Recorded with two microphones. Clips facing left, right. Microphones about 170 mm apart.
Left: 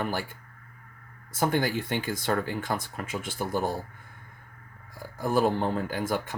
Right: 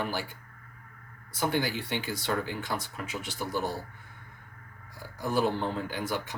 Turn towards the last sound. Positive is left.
turn(degrees=50)  # may be behind; listen again after turning